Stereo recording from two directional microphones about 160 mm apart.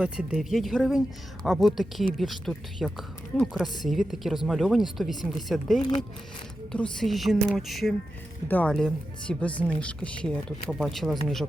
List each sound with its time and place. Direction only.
0.0 s speech: 5° right (ahead or behind)